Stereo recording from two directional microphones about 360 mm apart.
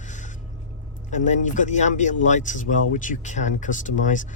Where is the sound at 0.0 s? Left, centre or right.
Centre.